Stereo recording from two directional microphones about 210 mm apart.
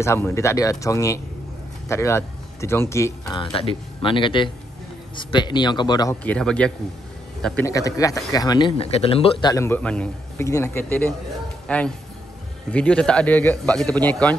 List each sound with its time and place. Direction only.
0.0 s speech: 15° left (ahead or behind)
3.5 s a man's voice: 25° left (ahead or behind)
6.2 s a man's voice: 5° left (ahead or behind)